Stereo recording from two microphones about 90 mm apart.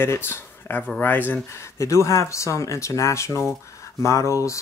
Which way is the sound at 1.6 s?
35° left (ahead or behind).